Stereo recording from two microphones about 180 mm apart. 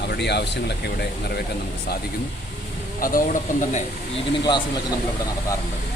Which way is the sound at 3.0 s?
50° left (ahead or behind).